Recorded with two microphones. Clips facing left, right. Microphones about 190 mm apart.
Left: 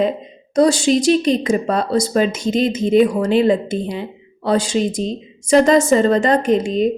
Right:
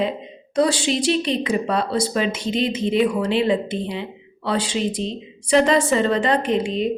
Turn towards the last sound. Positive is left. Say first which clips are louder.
# left 5 dB
turn(degrees=45)  # may be behind; listen again after turning